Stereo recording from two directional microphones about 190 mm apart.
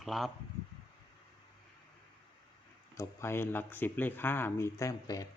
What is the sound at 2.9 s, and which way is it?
Speech, 15° left (ahead or behind).